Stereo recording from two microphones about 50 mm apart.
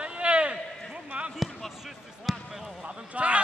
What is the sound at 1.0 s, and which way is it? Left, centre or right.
Basketball bounce, right.